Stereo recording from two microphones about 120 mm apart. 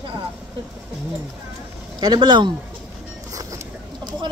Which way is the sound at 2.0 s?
40° right (ahead or behind).